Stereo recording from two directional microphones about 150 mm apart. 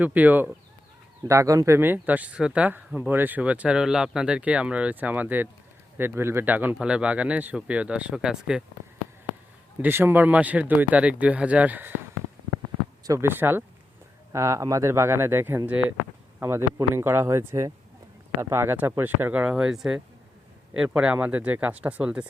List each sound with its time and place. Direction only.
0.0 s speech: 10° right (ahead or behind)
9.8 s speech: 15° right (ahead or behind)
13.1 s speech: 15° right (ahead or behind)